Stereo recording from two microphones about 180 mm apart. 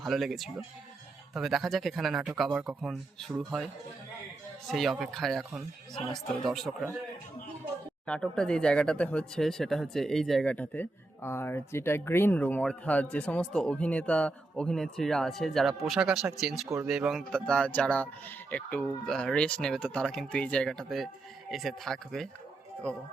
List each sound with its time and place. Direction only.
0.0 s speech: centre (ahead or behind)
4.7 s speech: centre (ahead or behind)
8.0 s speech: 5° left (ahead or behind)
16.6 s speech: 15° right (ahead or behind)
16.9 s speech: centre (ahead or behind)